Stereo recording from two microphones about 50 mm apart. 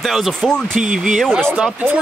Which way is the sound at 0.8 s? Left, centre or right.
Centre.